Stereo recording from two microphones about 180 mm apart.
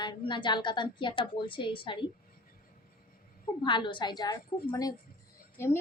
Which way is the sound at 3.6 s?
25° left (ahead or behind).